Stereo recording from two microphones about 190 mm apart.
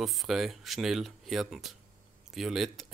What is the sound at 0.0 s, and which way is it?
Speech, centre (ahead or behind).